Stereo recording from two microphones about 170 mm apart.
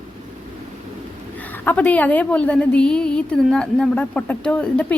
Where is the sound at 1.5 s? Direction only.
10° left (ahead or behind).